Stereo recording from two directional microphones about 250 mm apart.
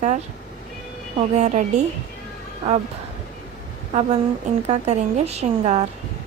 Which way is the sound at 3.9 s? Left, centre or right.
Right.